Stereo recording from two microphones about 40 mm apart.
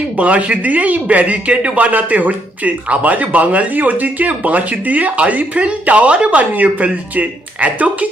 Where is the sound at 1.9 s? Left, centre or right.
Right.